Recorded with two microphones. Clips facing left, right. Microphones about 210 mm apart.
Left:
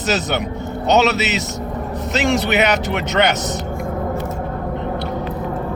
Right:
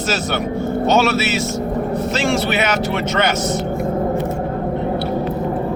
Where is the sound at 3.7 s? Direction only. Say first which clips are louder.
Right 4 dB; 20° right (ahead or behind).